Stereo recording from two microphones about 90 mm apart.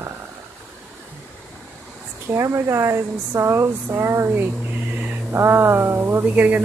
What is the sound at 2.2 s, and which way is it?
Speech, 35° right (ahead or behind).